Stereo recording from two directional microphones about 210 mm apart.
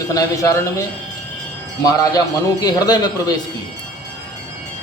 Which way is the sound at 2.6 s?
20° left (ahead or behind).